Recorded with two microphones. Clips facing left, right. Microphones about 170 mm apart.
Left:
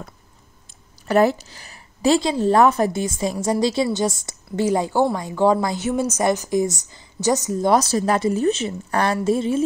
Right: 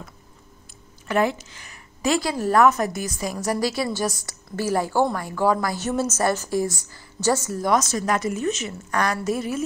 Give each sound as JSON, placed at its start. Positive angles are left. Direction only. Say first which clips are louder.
{"t": 1.0, "sound": "a woman's voice", "louder": "left 5 dB", "side_deg": 35}
{"t": 5.8, "sound": "a woman's voice", "louder": "left 2 dB", "side_deg": 10}
{"t": 7.7, "sound": "a woman's voice", "louder": "left 3 dB", "side_deg": 30}